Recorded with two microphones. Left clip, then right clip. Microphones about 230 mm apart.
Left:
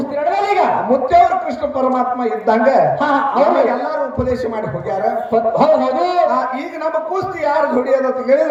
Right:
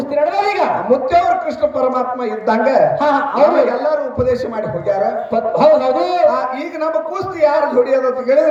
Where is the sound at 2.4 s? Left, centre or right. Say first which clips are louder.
Even; right.